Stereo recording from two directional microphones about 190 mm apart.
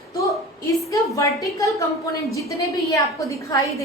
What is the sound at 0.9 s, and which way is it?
Speech, 15° left (ahead or behind).